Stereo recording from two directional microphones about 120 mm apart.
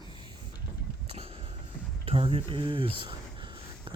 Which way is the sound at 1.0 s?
50° right (ahead or behind).